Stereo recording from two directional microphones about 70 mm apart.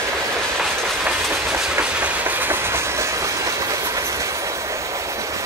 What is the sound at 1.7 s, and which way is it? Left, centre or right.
Train, centre.